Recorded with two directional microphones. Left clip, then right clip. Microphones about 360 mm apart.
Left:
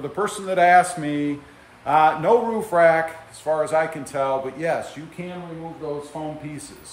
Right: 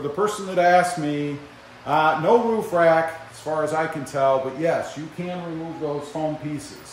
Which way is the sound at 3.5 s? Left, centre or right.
Centre.